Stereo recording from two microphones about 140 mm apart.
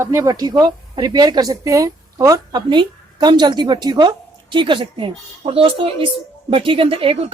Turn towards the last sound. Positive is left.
turn(degrees=-40)  # may be behind; listen again after turning